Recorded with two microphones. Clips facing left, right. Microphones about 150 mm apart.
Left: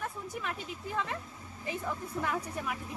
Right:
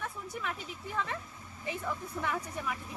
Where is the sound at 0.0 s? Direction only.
5° left (ahead or behind).